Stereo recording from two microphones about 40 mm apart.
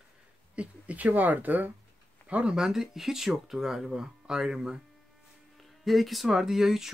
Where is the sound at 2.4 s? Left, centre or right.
Centre.